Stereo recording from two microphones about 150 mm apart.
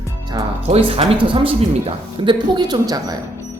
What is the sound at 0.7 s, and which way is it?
A woman's voice, 40° right (ahead or behind).